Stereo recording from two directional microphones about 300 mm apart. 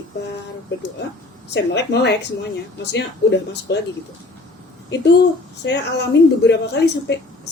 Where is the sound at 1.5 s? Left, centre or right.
Left.